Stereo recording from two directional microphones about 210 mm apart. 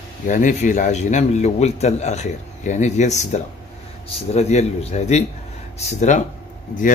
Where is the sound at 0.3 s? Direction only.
35° left (ahead or behind).